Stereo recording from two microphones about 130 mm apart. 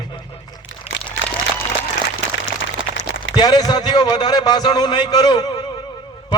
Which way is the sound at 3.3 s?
35° left (ahead or behind).